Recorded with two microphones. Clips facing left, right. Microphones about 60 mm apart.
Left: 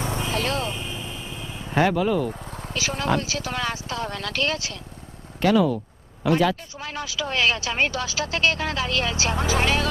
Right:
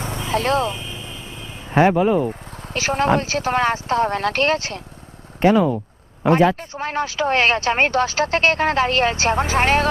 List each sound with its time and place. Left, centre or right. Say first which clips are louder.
0.3 s speech: right 10 dB; right
1.7 s speech: right 5 dB; right
2.6 s speech: right 8 dB; right
5.4 s speech: right 4 dB; right
6.2 s speech: right 5 dB; right